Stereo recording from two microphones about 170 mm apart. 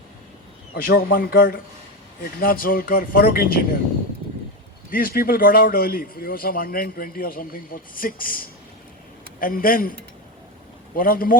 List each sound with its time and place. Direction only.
0.8 s a man's voice: 60° left (ahead or behind)
4.9 s a man's voice: 55° left (ahead or behind)
10.9 s a man's voice: 55° left (ahead or behind)